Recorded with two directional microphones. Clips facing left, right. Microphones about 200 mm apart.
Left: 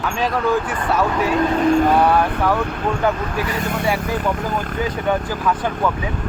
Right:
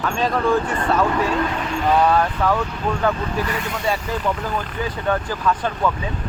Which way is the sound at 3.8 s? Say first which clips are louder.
Left 1 dB; 10° left (ahead or behind).